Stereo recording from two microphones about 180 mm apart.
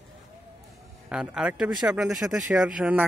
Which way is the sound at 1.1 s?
5° right (ahead or behind).